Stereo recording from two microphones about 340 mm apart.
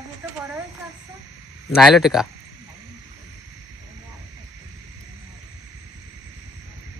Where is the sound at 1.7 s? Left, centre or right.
Centre.